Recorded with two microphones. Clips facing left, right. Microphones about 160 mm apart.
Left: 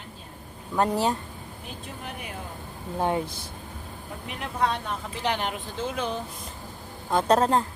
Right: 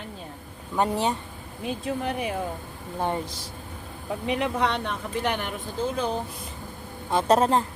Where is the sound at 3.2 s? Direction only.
55° left (ahead or behind).